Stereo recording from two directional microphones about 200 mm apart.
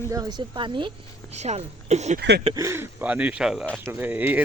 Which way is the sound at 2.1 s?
55° right (ahead or behind).